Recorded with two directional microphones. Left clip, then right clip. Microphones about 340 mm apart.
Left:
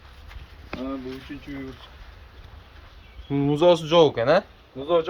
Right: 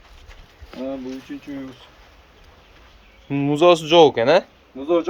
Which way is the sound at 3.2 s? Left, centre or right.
Centre.